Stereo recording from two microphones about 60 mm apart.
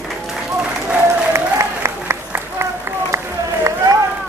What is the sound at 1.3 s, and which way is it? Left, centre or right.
Applause, right.